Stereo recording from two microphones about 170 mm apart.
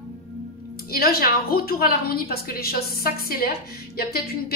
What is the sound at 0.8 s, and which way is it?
A woman's voice, 60° left (ahead or behind).